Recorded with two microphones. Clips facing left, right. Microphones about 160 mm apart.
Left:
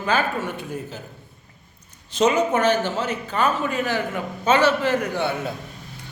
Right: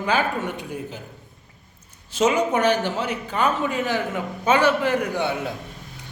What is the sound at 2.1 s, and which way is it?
A man's voice, 10° right (ahead or behind).